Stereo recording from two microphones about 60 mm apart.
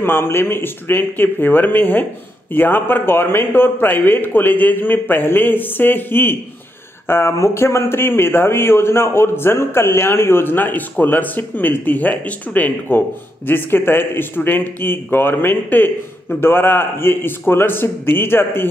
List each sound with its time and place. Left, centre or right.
0.0 s speech: left